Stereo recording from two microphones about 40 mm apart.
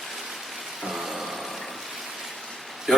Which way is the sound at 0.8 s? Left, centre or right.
Centre.